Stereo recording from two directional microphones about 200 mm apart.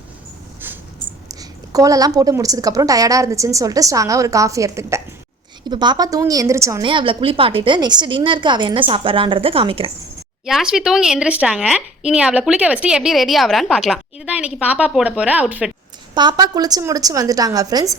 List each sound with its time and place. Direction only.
0.6 s a sound: 10° right (ahead or behind)
1.3 s a woman's voice: 15° right (ahead or behind)
10.4 s speech: 5° right (ahead or behind)
16.1 s a woman's voice: 20° right (ahead or behind)